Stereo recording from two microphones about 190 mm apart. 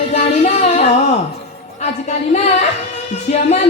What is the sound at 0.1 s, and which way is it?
Music, 35° left (ahead or behind).